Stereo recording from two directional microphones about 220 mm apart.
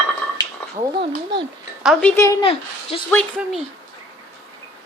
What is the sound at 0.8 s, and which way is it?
Speech, 20° right (ahead or behind).